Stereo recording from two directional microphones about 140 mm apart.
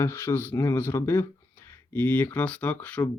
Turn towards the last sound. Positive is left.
turn(degrees=10)  # may be behind; listen again after turning